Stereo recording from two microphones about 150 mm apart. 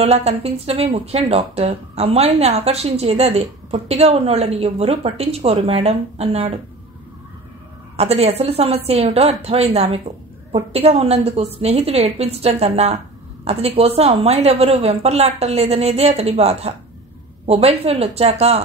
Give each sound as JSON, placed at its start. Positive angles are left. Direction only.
{"t": 0.0, "sound": "a woman's voice", "side_deg": -45}
{"t": 7.9, "sound": "a woman's voice", "side_deg": -45}